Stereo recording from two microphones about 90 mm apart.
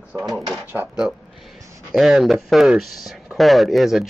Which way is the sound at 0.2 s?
Centre (ahead or behind).